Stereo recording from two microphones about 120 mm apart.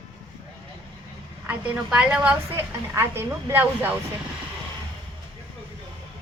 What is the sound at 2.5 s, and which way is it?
A woman's voice, 20° right (ahead or behind).